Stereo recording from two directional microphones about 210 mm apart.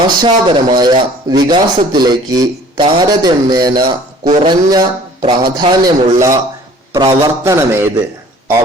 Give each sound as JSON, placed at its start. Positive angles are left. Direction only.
{"t": 0.2, "sound": "a man's voice", "side_deg": -20}